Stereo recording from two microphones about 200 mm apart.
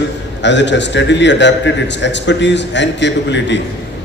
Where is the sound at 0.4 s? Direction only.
60° left (ahead or behind).